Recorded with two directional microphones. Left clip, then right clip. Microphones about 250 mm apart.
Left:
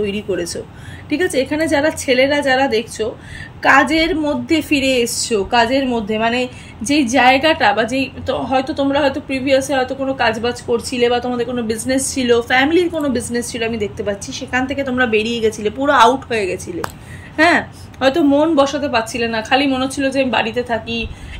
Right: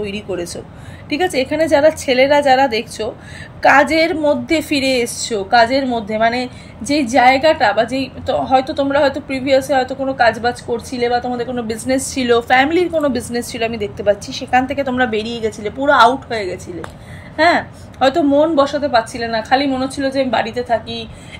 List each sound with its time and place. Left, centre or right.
0.0 s speech: centre
10.7 s speech: left
11.1 s speech: centre